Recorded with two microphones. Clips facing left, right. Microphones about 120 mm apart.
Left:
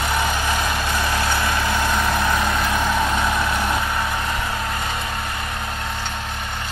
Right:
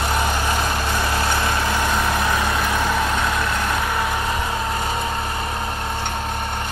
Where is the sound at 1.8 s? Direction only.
10° right (ahead or behind); by 3.7 s 5° left (ahead or behind).